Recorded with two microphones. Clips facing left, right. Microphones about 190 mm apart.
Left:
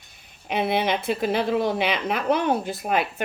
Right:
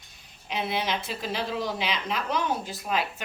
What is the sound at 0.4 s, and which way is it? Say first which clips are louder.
A woman's voice: left 6 dB; 55° left (ahead or behind).